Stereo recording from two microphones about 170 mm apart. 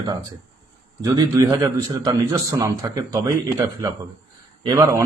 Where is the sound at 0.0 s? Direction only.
25° right (ahead or behind).